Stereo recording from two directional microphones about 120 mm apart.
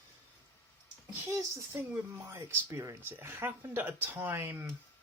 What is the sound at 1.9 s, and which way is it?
Speech, 20° right (ahead or behind).